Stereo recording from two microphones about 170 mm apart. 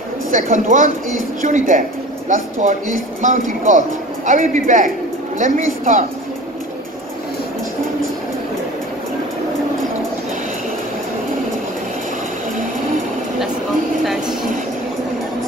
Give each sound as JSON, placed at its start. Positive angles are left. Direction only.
{"t": 0.3, "sound": "speech", "side_deg": -50}